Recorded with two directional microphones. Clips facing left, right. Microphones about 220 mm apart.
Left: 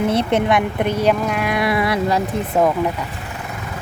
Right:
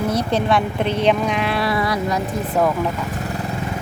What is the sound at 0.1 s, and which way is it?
Speech, 25° left (ahead or behind).